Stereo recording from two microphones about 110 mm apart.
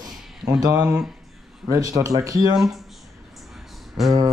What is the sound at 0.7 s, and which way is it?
Speech, 15° right (ahead or behind).